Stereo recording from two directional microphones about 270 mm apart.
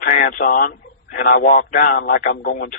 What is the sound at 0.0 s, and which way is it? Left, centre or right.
A man's voice, left.